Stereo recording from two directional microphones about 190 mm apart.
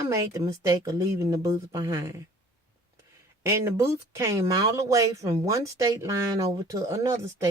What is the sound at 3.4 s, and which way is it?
Speech, 15° right (ahead or behind).